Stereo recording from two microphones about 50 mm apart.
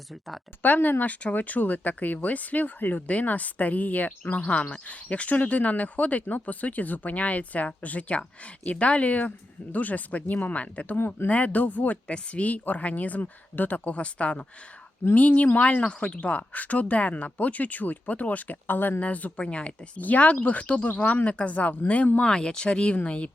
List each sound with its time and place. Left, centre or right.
0.6 s speech: left
10.9 s speech: left
11.3 s speech: left
15.1 s speech: left
20.0 s speech: left
22.2 s speech: centre